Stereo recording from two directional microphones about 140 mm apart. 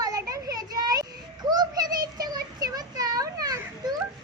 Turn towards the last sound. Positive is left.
turn(degrees=-30)  # may be behind; listen again after turning